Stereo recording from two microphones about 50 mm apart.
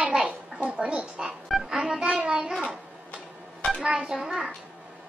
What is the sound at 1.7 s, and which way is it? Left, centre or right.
Speech, centre.